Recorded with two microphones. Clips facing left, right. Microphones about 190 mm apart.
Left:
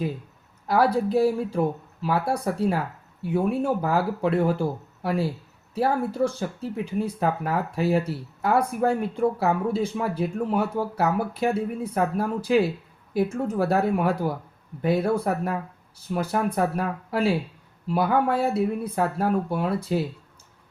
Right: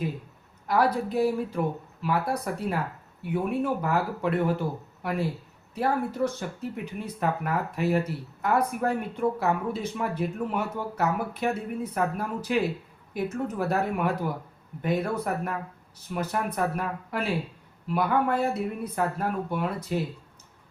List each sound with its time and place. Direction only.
0.7 s speech: 30° left (ahead or behind)
5.7 s speech: 30° left (ahead or behind)